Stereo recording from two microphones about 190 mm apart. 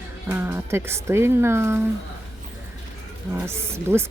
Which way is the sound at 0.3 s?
10° right (ahead or behind).